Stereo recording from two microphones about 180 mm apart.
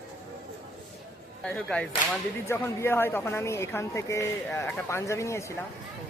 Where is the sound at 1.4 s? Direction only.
5° left (ahead or behind).